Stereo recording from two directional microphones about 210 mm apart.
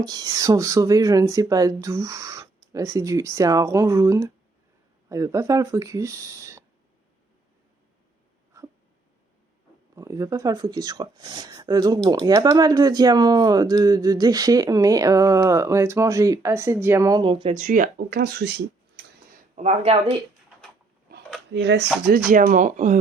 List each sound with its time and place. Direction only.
0.0 s speech: 20° right (ahead or behind)
9.9 s speech: 15° right (ahead or behind); by 19.0 s 50° right (ahead or behind)
19.5 s speech: 30° right (ahead or behind)
21.5 s speech: 55° right (ahead or behind)
22.3 s speech: 40° right (ahead or behind)